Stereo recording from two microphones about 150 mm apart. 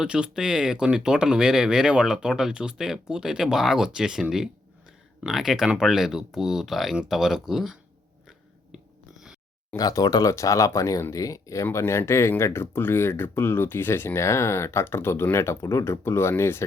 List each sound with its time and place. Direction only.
0.0 s speech: 5° right (ahead or behind)
8.7 s a sound: 5° right (ahead or behind)
9.7 s speech: 25° left (ahead or behind)